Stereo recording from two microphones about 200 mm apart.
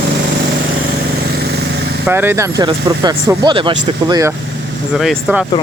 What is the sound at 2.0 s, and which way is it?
Speech, 10° right (ahead or behind).